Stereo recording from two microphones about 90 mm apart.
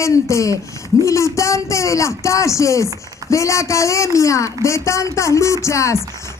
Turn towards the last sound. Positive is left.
turn(degrees=35)  # may be behind; listen again after turning